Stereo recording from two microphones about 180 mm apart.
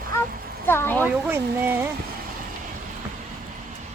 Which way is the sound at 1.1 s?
10° right (ahead or behind).